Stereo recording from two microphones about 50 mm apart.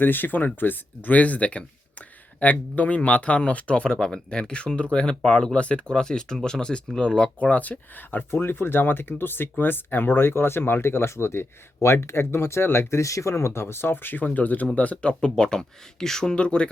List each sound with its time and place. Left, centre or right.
0.0 s speech: left
3.9 s speech: centre; by 8.2 s left
8.3 s speech: left
13.0 s speech: left; by 16.6 s centre